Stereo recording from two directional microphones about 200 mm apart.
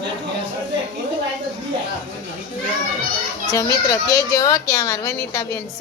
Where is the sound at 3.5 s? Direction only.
15° left (ahead or behind).